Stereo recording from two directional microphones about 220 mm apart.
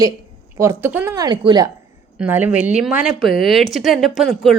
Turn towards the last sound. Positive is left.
turn(degrees=0)  # may be behind; listen again after turning